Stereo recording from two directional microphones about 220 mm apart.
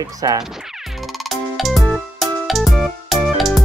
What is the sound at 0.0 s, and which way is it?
Speech, 15° right (ahead or behind).